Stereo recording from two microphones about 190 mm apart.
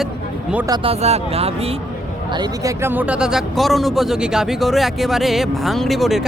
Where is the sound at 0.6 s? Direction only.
25° right (ahead or behind).